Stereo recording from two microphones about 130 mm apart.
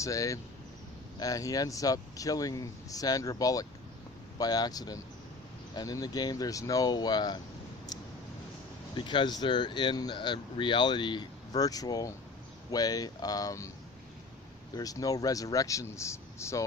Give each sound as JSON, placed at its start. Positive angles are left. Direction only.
{"t": 0.0, "sound": "speech", "side_deg": 25}
{"t": 9.0, "sound": "speech", "side_deg": 35}
{"t": 14.8, "sound": "speech", "side_deg": 25}